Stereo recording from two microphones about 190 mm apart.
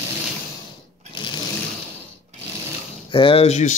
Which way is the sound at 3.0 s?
25° left (ahead or behind).